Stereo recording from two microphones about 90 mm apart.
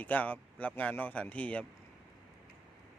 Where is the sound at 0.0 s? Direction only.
15° left (ahead or behind).